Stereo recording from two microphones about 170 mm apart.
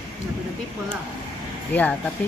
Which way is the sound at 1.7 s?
10° left (ahead or behind).